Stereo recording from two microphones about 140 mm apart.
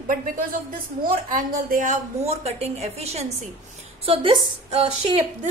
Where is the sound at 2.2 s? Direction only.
50° right (ahead or behind).